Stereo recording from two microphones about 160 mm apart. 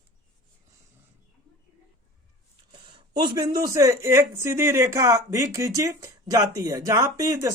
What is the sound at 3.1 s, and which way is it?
Speech, 25° right (ahead or behind).